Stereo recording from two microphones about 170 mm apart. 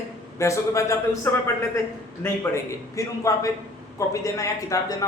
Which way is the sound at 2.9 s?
20° left (ahead or behind).